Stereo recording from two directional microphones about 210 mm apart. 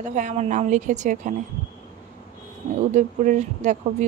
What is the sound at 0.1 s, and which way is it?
Speech, 35° right (ahead or behind).